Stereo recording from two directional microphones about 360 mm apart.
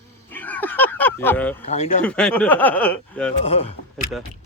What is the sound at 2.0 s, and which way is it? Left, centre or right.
Speech, centre.